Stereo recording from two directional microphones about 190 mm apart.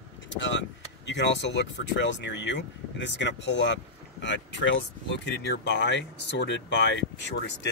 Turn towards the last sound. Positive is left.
turn(degrees=65)  # may be behind; listen again after turning